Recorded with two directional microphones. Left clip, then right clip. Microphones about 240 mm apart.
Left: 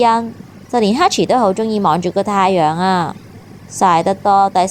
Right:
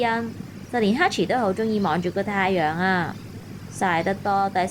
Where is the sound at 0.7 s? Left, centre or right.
Left.